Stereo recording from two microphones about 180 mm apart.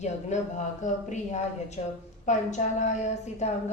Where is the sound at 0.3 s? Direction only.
40° left (ahead or behind).